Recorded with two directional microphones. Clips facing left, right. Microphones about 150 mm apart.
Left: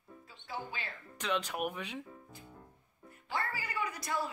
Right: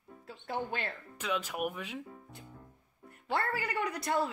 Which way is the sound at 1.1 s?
5° right (ahead or behind).